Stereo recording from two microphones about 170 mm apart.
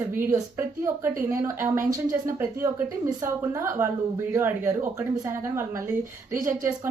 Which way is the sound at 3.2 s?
15° right (ahead or behind).